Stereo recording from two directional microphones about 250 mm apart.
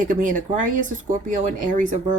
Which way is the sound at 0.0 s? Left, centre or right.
Right.